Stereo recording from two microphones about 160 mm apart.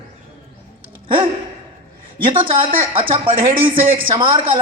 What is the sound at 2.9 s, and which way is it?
A man's voice, 35° right (ahead or behind).